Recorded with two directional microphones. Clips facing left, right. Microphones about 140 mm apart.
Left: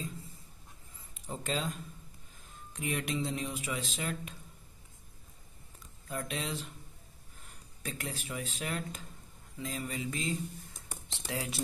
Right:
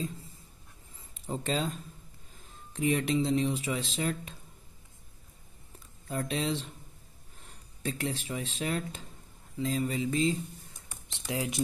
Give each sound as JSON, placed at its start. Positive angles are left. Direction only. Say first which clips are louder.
{"t": 1.2, "sound": "speech", "louder": "right 4 dB", "side_deg": -30}
{"t": 6.0, "sound": "speech", "louder": "right 6 dB", "side_deg": -30}
{"t": 7.8, "sound": "speech", "louder": "right 7 dB", "side_deg": -30}